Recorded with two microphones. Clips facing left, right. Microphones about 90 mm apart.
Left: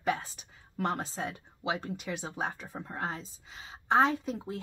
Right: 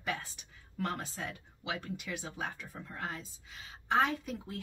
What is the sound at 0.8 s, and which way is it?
Speech, 30° left (ahead or behind).